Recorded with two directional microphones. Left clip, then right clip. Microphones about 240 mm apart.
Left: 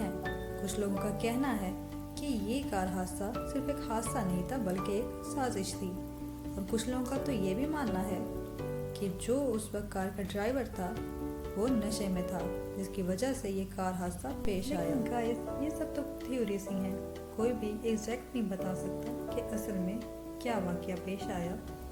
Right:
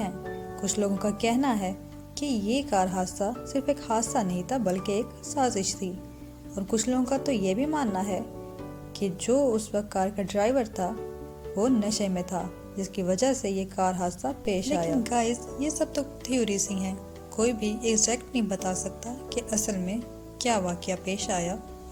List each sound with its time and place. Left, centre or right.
0.6 s speech: right